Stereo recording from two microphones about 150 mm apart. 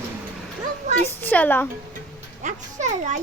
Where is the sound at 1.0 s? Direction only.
10° left (ahead or behind).